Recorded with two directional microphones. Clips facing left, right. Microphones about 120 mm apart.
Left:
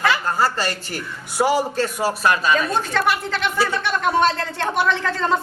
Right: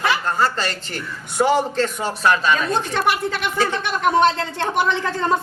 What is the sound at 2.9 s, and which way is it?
A woman's voice, 15° right (ahead or behind).